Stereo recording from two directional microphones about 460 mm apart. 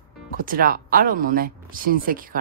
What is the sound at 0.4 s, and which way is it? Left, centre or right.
Speech, centre.